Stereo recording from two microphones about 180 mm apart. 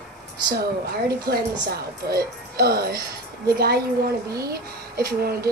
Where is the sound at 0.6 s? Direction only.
60° right (ahead or behind).